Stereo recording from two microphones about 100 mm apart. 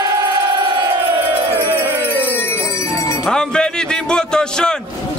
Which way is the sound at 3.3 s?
10° left (ahead or behind).